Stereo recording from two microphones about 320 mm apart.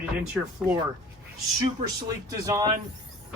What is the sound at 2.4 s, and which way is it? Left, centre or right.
Speech, centre.